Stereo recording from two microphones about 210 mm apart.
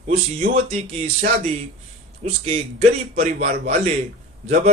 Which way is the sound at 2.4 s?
30° right (ahead or behind).